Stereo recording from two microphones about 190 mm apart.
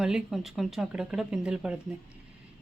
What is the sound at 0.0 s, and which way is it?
Speech, centre (ahead or behind).